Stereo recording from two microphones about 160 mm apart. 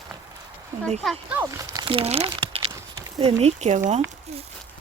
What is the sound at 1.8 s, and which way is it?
Speech, 35° right (ahead or behind).